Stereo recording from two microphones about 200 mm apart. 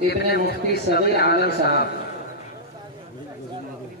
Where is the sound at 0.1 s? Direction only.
55° left (ahead or behind).